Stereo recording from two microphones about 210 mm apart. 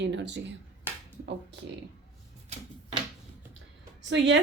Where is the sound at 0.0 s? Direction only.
55° right (ahead or behind).